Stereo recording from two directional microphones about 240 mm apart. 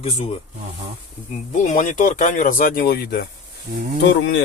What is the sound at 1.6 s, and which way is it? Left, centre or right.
Speech, left.